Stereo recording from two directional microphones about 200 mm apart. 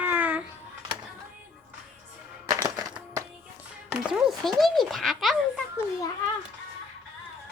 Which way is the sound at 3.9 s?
10° right (ahead or behind).